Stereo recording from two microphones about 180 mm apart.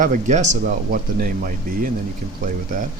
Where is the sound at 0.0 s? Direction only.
45° right (ahead or behind).